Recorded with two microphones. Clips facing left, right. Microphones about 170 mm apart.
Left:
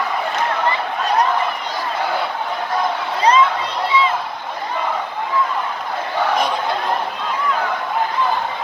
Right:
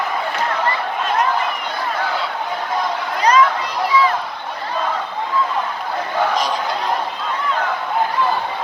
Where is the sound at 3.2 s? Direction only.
30° left (ahead or behind).